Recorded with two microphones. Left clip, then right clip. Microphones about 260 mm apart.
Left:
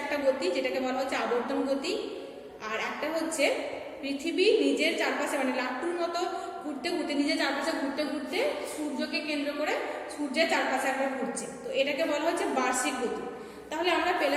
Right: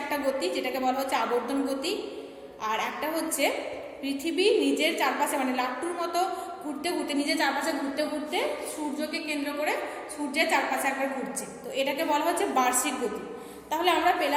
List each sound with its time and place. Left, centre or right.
0.1 s a woman's voice: right